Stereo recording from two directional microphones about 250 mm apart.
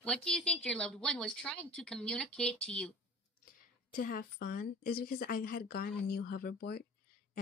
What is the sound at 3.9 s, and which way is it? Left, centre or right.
Speech, left.